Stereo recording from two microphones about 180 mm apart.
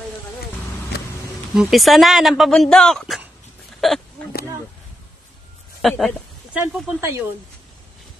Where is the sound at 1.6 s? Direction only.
Centre (ahead or behind).